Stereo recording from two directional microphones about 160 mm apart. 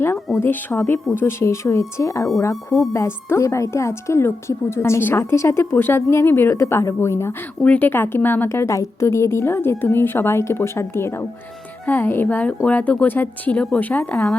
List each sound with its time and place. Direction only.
0.3 s speech: 15° left (ahead or behind)